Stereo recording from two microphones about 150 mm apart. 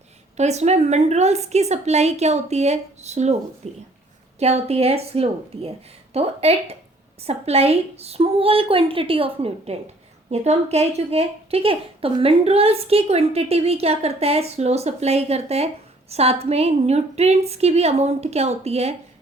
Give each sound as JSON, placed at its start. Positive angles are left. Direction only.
{"t": 0.3, "sound": "a woman's voice", "side_deg": -50}